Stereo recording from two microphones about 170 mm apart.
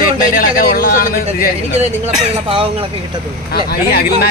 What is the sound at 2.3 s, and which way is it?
Speech, 35° right (ahead or behind).